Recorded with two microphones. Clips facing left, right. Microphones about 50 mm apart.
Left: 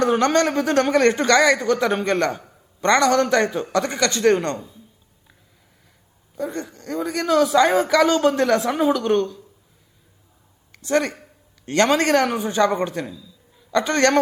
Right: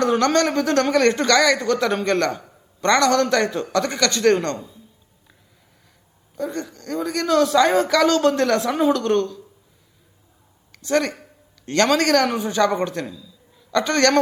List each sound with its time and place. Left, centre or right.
0.0 s a man's voice: centre
6.3 s a man's voice: centre
10.7 s speech: centre
12.9 s a sound: centre
13.7 s a man's voice: left